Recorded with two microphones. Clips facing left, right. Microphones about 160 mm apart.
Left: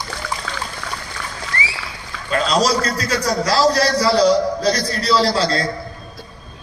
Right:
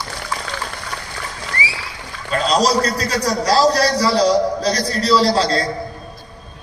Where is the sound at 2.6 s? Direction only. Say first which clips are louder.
Right 2 dB; 40° right (ahead or behind).